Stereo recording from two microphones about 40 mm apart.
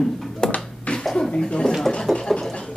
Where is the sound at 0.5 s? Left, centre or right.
Left.